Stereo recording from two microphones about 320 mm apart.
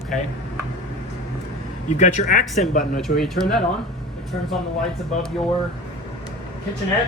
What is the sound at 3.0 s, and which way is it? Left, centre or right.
Speech, centre.